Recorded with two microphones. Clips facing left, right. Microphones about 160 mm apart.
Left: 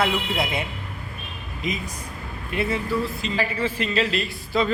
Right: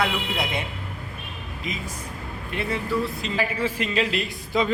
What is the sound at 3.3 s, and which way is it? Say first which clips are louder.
Speech: even; 10° right (ahead or behind).